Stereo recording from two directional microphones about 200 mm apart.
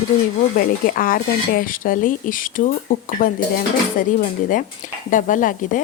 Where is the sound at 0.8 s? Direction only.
45° left (ahead or behind).